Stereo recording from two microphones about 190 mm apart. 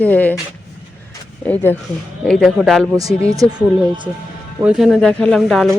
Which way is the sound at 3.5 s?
5° right (ahead or behind).